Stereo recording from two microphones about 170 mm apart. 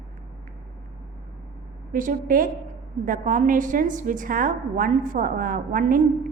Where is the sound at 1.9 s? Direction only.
55° right (ahead or behind).